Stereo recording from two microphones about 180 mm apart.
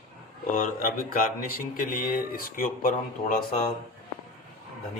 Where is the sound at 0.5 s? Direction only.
50° left (ahead or behind).